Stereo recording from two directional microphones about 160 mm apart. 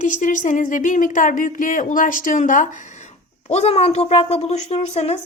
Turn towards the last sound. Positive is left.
turn(degrees=40)  # may be behind; listen again after turning